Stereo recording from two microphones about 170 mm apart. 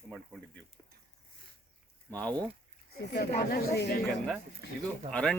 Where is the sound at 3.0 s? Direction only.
70° left (ahead or behind).